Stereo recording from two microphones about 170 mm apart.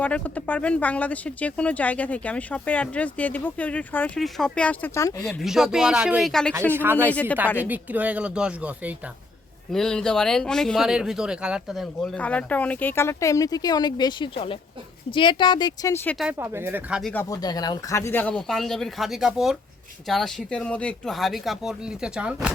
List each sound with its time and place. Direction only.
0.0 s speech: 10° left (ahead or behind)
5.0 s speech: 20° left (ahead or behind)
5.3 s speech: centre (ahead or behind)
7.1 s speech: 10° left (ahead or behind)
7.7 s speech: 10° right (ahead or behind)
9.7 s speech: 5° left (ahead or behind); by 16.0 s 20° left (ahead or behind)
16.0 s speech: centre (ahead or behind)
16.4 s speech: 15° right (ahead or behind)
17.0 s speech: 5° left (ahead or behind)
17.2 s speech: 20° left (ahead or behind); by 22.4 s 5° right (ahead or behind)